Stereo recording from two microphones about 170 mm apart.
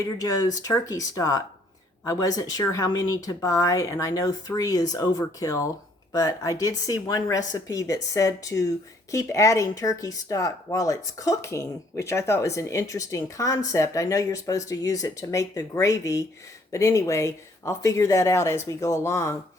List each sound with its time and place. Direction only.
0.0 s speech: 20° left (ahead or behind)